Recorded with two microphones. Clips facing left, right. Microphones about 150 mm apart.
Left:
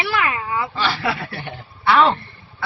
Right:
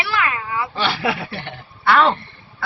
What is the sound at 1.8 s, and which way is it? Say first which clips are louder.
Speech: even; centre (ahead or behind).